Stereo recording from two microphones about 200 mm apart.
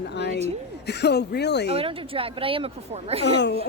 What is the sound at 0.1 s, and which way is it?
Speech, 60° left (ahead or behind).